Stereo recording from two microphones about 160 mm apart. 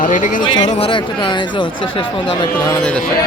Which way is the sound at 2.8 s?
5° left (ahead or behind).